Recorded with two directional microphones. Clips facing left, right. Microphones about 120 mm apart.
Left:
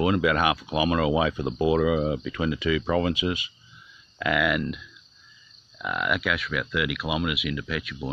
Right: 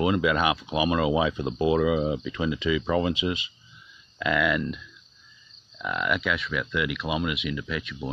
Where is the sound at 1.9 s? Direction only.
5° right (ahead or behind).